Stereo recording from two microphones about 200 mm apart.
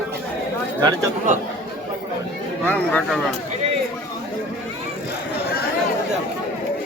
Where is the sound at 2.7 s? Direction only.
10° left (ahead or behind).